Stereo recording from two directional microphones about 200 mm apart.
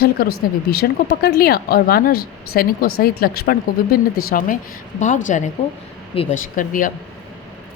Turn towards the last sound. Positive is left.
turn(degrees=40)  # may be behind; listen again after turning